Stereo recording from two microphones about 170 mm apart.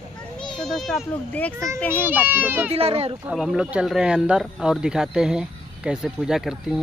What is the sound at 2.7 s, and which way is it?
Speech, 35° right (ahead or behind).